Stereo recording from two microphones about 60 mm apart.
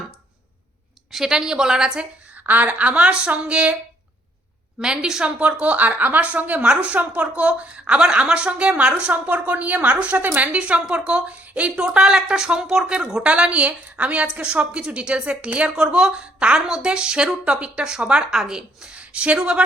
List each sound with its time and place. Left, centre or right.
1.1 s a woman's voice: centre
2.3 s a woman's voice: right
4.8 s a woman's voice: centre
5.4 s a woman's voice: right